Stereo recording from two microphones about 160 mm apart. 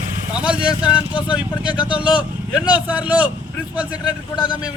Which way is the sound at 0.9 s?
30° left (ahead or behind).